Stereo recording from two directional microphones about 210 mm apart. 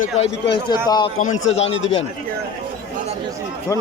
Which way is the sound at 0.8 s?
20° left (ahead or behind).